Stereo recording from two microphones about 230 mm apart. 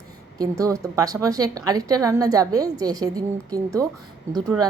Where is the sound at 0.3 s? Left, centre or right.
Centre.